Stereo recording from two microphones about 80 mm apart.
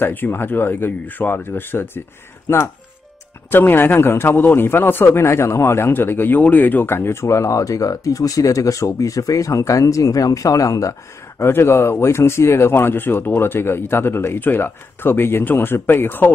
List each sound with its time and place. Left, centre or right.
0.0 s a man's voice: left
11.3 s speech: left